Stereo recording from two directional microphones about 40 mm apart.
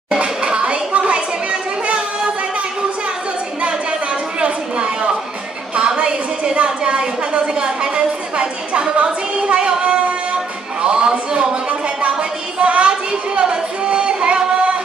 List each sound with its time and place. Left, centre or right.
0.1 s children playing: right
4.4 s chatter: right
5.8 s a sound: right
8.9 s music: right
12.0 s a sound: right
13.4 s singing: right